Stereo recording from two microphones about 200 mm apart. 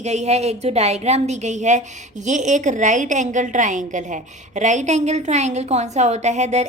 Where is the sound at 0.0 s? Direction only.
35° right (ahead or behind).